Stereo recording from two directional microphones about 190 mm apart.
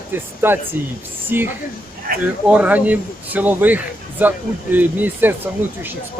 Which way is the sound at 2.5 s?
10° right (ahead or behind).